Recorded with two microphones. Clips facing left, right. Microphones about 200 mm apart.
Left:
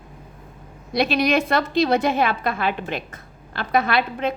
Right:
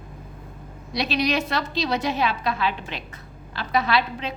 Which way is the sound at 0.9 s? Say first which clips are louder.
Left 4 dB; 55° left (ahead or behind).